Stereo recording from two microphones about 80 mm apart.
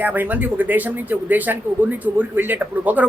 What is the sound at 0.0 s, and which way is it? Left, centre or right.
Speech, right.